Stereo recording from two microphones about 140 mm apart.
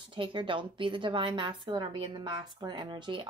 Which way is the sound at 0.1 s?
35° right (ahead or behind).